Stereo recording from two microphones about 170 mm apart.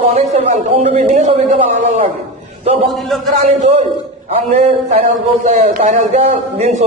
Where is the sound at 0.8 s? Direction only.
45° right (ahead or behind).